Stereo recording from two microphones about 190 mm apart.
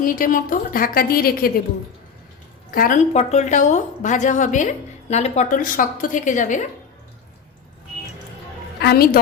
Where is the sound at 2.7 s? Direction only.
45° left (ahead or behind).